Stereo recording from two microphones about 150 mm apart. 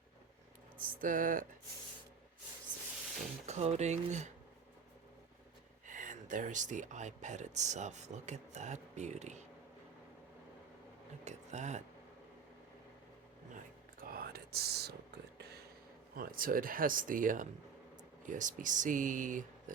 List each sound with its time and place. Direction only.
0.8 s speech: 65° right (ahead or behind)
3.4 s speech: 50° right (ahead or behind)
5.9 s speech: 60° right (ahead or behind)
11.3 s speech: 50° right (ahead or behind)
14.0 s whispering: 85° right
15.4 s a sound: 90° right
16.1 s speech: 75° right (ahead or behind)